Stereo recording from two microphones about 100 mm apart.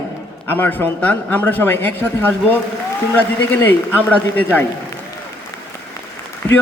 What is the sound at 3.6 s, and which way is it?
Speech, 20° left (ahead or behind).